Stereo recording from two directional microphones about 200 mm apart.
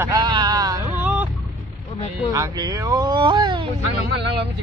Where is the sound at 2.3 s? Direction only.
20° right (ahead or behind).